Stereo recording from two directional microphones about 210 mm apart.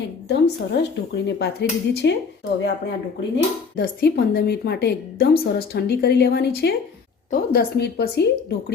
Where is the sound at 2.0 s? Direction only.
55° left (ahead or behind).